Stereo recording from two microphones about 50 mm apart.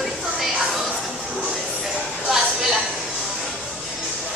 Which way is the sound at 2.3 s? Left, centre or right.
Centre.